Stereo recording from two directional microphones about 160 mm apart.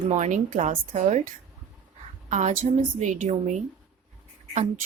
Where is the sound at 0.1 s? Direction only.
50° right (ahead or behind).